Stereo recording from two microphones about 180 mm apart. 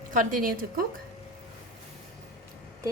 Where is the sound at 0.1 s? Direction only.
50° right (ahead or behind).